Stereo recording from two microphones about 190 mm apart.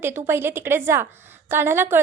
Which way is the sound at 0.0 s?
10° right (ahead or behind).